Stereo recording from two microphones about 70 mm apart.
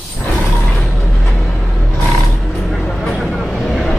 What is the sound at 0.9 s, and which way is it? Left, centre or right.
Music, left.